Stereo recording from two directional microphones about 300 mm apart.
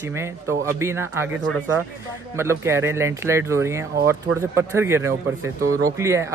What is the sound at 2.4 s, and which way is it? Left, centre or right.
Speech, centre.